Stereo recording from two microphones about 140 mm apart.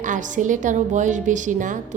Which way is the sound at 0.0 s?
65° right (ahead or behind).